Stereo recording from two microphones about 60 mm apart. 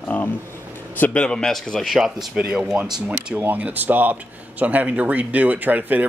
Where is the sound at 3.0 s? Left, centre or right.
Centre.